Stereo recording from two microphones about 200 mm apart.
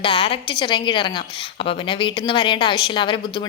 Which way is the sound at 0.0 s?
25° left (ahead or behind).